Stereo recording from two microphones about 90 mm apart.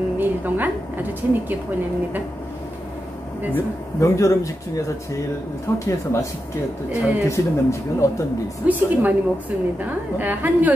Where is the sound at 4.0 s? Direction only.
35° left (ahead or behind).